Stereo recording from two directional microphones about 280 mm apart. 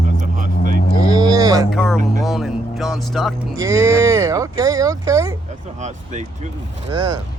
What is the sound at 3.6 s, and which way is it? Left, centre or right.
Speech, centre.